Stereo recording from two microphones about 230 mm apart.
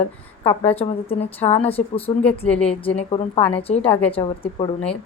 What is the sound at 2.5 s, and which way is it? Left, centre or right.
Speech, centre.